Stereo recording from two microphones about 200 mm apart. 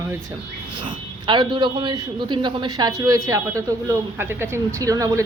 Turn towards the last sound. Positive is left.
turn(degrees=-15)  # may be behind; listen again after turning